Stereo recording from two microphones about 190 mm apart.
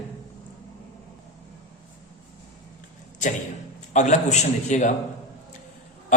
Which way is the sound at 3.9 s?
40° left (ahead or behind).